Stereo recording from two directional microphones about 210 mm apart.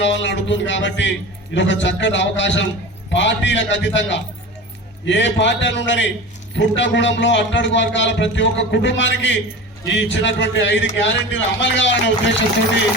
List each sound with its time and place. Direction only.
0.0 s a man's voice: 60° left (ahead or behind)